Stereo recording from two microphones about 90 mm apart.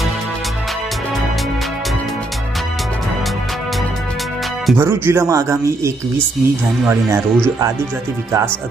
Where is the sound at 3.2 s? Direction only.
Centre (ahead or behind).